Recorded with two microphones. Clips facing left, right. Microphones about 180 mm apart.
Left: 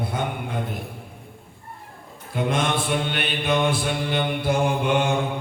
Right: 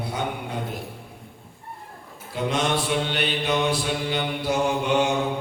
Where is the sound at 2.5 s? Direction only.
50° left (ahead or behind).